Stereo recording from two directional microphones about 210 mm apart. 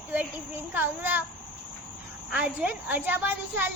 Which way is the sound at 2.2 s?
5° right (ahead or behind).